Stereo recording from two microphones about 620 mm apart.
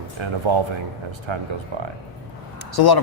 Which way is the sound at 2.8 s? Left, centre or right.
Left.